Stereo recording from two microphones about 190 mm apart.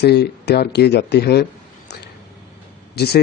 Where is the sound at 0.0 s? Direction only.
60° left (ahead or behind).